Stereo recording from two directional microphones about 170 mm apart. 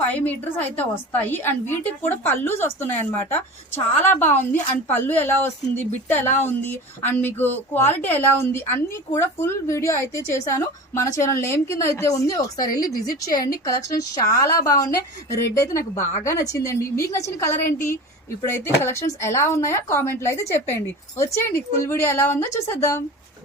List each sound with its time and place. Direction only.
0.1 s a woman's voice: 10° left (ahead or behind)